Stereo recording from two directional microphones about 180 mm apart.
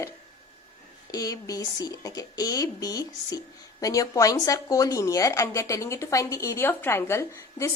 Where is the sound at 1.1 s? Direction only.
20° left (ahead or behind).